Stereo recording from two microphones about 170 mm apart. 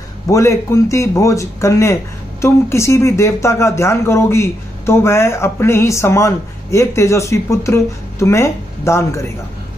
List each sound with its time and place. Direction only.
0.3 s speech: 15° left (ahead or behind)